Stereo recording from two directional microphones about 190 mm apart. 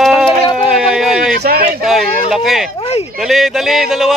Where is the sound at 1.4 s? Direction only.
55° right (ahead or behind).